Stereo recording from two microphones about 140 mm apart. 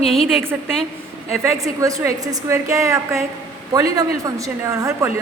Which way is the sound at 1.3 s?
20° right (ahead or behind).